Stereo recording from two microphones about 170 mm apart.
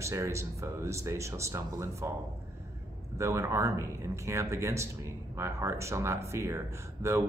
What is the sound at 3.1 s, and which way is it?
Speech, 15° right (ahead or behind).